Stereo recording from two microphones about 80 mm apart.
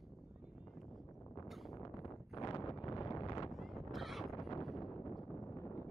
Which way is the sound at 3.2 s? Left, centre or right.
Left.